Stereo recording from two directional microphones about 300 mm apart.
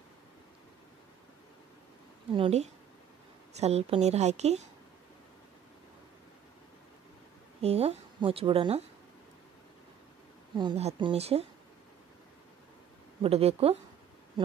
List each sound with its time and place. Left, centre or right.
2.3 s speech: centre
7.6 s speech: centre
10.5 s speech: centre
13.2 s speech: centre